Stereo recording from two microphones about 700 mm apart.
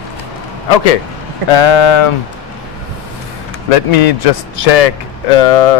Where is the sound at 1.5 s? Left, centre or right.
Left.